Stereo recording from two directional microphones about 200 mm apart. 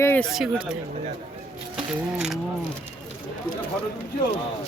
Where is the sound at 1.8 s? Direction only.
5° right (ahead or behind).